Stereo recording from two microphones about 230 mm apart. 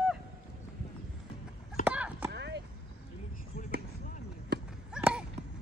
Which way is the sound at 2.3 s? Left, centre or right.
Right.